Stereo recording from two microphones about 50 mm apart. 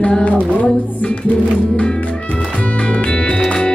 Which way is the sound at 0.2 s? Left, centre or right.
Left.